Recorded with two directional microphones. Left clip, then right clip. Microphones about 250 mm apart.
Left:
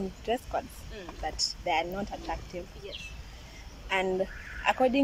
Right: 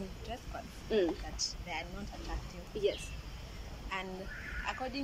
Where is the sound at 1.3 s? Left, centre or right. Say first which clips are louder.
Left 10 dB; left.